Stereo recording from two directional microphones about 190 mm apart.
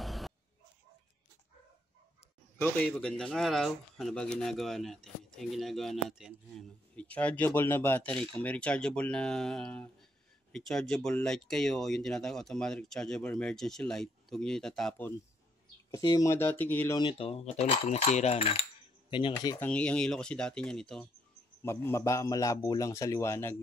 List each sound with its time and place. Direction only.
0.0 s a sound: centre (ahead or behind)
2.6 s speech: 10° left (ahead or behind)
15.9 s speech: 20° left (ahead or behind)
17.0 s cutlery: 25° left (ahead or behind)
19.0 s speech: 25° left (ahead or behind)
19.7 s speech: 5° left (ahead or behind)
21.6 s speech: 15° left (ahead or behind)